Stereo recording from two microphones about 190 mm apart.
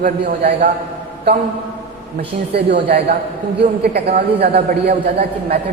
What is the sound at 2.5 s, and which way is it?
A man's voice, 60° right (ahead or behind).